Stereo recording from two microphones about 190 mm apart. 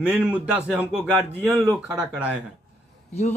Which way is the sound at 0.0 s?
5° right (ahead or behind).